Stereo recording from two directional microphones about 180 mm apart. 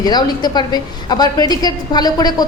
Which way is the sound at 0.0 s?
25° left (ahead or behind).